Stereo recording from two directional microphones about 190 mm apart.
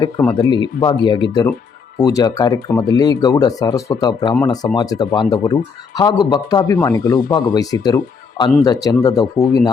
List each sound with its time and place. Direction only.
0.3 s speech: 25° left (ahead or behind)